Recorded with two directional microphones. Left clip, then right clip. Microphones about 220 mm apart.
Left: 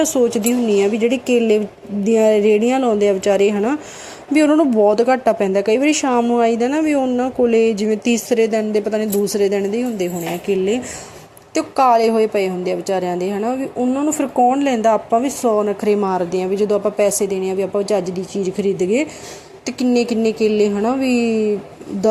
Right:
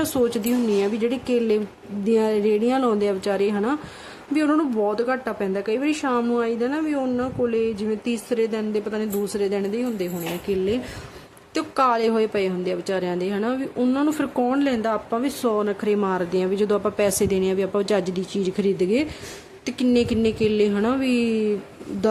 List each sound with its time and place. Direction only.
0.0 s speech: 5° right (ahead or behind)
6.4 s speech: 10° left (ahead or behind); by 14.6 s 10° right (ahead or behind)
14.6 s speech: centre (ahead or behind)
16.6 s a woman's voice: 20° right (ahead or behind)
19.8 s speech: 50° right (ahead or behind)
20.7 s speech: 10° right (ahead or behind)
21.0 s speech: 50° right (ahead or behind)